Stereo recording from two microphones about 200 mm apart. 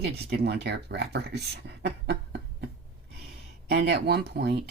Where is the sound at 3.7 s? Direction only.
55° right (ahead or behind).